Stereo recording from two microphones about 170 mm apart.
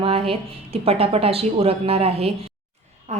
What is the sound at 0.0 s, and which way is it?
A woman's voice, 35° right (ahead or behind).